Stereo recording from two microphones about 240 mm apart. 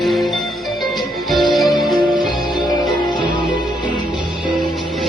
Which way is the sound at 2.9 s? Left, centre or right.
Centre.